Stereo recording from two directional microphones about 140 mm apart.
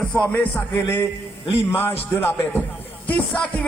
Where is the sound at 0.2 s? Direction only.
15° left (ahead or behind).